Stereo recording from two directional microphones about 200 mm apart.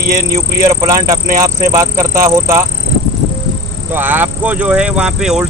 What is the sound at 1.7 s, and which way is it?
Speech, 15° right (ahead or behind).